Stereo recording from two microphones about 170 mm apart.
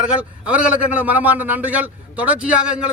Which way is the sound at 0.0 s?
5° right (ahead or behind).